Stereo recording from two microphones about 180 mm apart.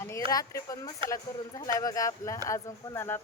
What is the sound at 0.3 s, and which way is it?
Speech, 20° left (ahead or behind).